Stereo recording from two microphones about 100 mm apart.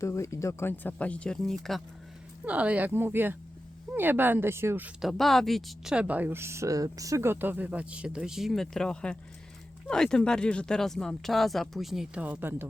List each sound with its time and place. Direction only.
0.0 s speech: 30° left (ahead or behind); by 1.8 s centre (ahead or behind)
2.4 s a woman's voice: 15° right (ahead or behind)
4.9 s a woman's voice: centre (ahead or behind)
12.2 s speech: 20° right (ahead or behind)